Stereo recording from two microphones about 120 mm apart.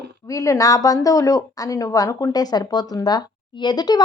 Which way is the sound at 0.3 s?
30° left (ahead or behind).